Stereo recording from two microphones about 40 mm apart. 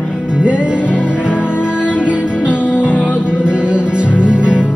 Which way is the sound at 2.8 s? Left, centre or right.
Left.